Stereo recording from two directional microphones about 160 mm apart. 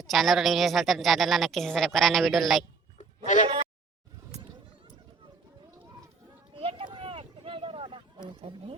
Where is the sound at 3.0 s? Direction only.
50° left (ahead or behind).